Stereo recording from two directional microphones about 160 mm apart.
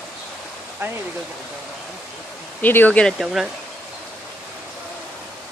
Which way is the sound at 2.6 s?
10° left (ahead or behind).